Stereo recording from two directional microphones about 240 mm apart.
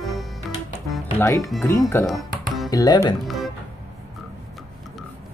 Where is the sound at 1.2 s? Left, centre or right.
Centre.